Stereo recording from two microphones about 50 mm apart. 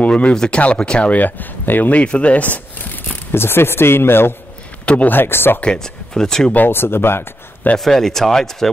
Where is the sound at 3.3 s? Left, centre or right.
Left.